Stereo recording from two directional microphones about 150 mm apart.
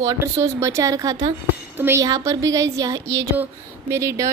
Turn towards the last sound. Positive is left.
turn(degrees=-20)  # may be behind; listen again after turning